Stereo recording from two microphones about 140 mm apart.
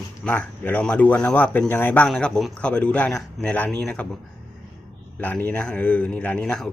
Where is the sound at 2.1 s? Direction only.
Centre (ahead or behind).